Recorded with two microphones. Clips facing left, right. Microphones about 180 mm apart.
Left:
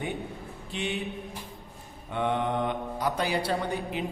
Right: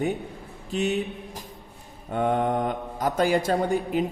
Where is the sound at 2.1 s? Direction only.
45° right (ahead or behind).